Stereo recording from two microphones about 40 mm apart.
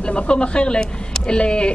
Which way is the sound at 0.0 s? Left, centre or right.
Left.